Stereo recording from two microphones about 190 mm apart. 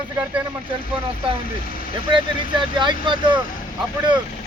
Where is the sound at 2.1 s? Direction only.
25° right (ahead or behind).